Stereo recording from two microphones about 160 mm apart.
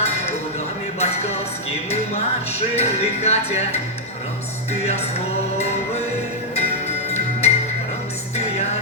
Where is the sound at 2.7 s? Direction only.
40° left (ahead or behind).